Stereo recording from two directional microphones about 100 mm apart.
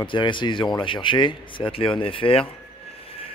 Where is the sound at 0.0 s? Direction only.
55° left (ahead or behind).